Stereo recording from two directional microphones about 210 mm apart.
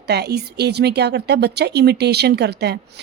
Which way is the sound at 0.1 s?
50° right (ahead or behind).